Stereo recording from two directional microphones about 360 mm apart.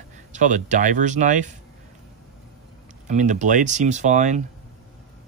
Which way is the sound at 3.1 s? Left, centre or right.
Centre.